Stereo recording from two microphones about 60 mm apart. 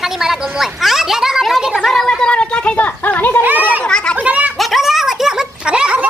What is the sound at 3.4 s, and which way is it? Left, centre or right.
Children playing, right.